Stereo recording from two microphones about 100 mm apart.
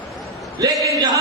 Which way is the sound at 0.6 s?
40° right (ahead or behind).